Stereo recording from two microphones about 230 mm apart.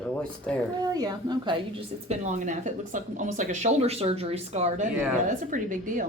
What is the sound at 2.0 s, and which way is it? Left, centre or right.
A woman's voice, right.